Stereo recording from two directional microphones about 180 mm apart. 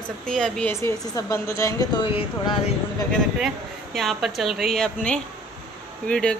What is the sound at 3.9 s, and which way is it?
A woman's voice, centre (ahead or behind).